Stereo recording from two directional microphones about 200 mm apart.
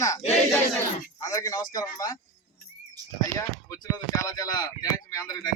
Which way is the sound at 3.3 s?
15° left (ahead or behind).